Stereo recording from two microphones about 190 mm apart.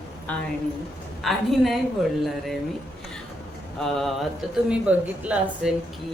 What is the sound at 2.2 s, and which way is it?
Speech, centre (ahead or behind).